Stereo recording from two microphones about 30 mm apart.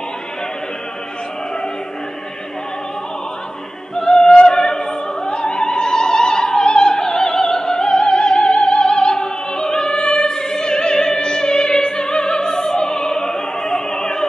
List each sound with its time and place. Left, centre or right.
3.9 s opera: left